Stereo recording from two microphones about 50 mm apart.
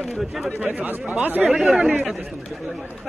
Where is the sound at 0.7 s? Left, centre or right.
Right.